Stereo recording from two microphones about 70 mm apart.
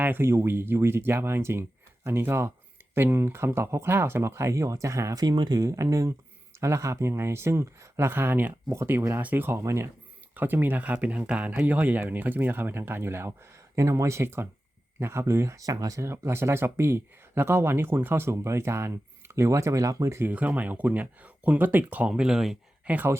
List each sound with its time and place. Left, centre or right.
0.0 s speech: right
5.2 s speech: right
5.6 s speech: right
10.3 s speech: right
16.0 s speech: right
20.3 s speech: right
22.2 s speech: centre
22.9 s speech: centre